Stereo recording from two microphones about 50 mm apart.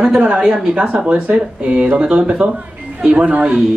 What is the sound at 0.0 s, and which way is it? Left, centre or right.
A man's voice, right.